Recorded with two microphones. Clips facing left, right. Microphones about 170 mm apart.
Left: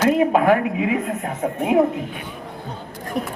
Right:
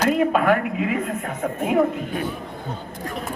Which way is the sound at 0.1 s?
20° left (ahead or behind).